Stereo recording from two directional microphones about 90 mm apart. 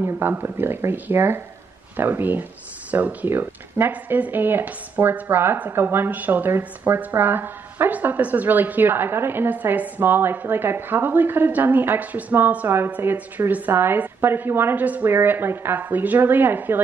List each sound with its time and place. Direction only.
0.0 s speech: 20° right (ahead or behind)